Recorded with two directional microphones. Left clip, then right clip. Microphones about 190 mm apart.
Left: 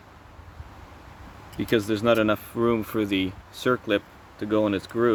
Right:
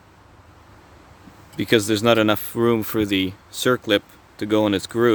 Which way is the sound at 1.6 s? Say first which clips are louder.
Right 5 dB; 50° right (ahead or behind).